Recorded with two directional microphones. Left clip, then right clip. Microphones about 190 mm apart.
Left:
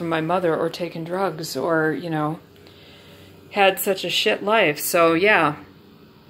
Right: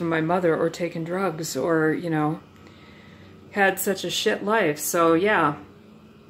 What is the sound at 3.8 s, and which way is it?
Speech, 5° right (ahead or behind).